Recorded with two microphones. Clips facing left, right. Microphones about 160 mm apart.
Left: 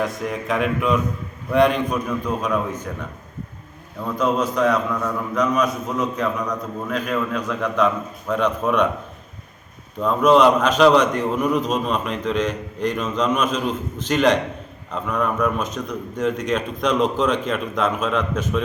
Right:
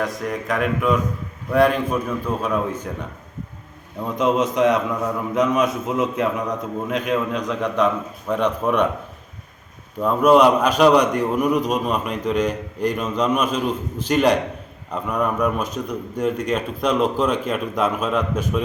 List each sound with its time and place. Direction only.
0.0 s a man's voice: 5° left (ahead or behind)
4.0 s a man's voice: 20° right (ahead or behind)
10.0 s a man's voice: 10° right (ahead or behind)